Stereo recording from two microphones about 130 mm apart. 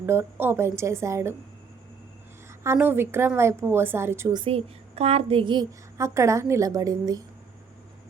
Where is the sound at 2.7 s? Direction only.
15° right (ahead or behind).